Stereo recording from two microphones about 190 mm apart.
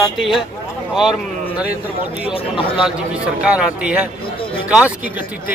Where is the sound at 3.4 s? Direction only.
5° right (ahead or behind).